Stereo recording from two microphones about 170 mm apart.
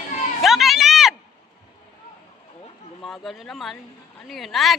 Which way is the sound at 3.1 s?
Centre (ahead or behind).